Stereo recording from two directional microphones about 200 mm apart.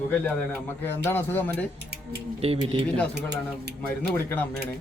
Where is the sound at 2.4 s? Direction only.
30° right (ahead or behind).